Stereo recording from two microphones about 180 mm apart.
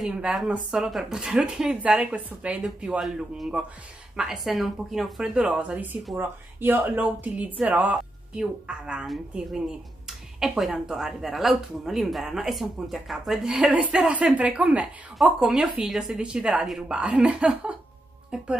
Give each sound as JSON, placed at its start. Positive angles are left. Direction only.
{"t": 0.0, "sound": "speech", "side_deg": -5}